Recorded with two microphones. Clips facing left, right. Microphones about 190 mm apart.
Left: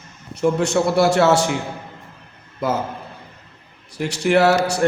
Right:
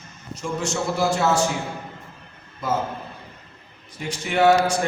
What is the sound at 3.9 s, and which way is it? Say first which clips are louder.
Speech: left 10 dB; 75° left (ahead or behind).